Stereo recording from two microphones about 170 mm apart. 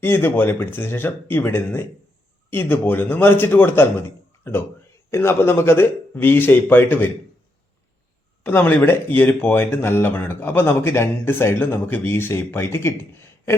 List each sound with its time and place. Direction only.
0.0 s speech: 15° left (ahead or behind)
8.4 s speech: 10° left (ahead or behind)